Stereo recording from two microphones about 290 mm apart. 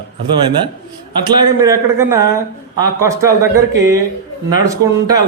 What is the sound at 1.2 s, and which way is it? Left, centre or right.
Speech, centre.